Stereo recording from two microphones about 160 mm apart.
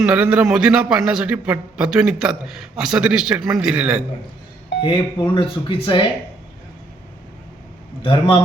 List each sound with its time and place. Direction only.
0.0 s a man's voice: 5° right (ahead or behind)
4.8 s speech: 30° left (ahead or behind)